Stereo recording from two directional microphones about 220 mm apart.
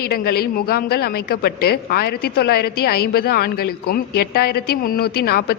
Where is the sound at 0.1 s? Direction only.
45° left (ahead or behind).